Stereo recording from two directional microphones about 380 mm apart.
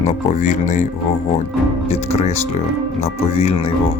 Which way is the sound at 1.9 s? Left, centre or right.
Centre.